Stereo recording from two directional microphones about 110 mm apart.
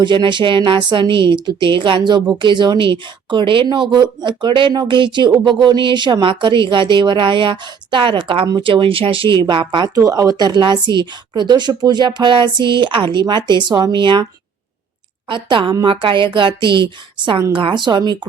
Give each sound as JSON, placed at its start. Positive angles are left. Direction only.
{"t": 0.0, "sound": "a woman's voice", "side_deg": -45}
{"t": 9.9, "sound": "a woman's voice", "side_deg": -30}
{"t": 15.3, "sound": "a woman's voice", "side_deg": -45}